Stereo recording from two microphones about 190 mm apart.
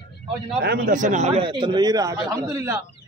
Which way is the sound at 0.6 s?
50° right (ahead or behind).